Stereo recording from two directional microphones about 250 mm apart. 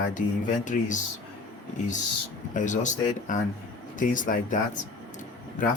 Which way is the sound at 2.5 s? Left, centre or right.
Left.